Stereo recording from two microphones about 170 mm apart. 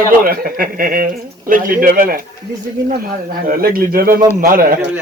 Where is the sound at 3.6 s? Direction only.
60° right (ahead or behind).